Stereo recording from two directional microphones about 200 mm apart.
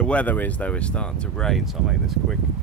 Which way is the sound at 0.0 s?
5° left (ahead or behind).